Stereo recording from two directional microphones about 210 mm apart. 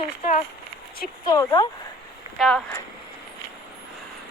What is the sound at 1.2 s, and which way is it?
Speech, 15° left (ahead or behind).